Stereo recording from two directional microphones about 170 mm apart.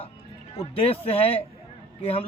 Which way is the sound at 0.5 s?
35° left (ahead or behind).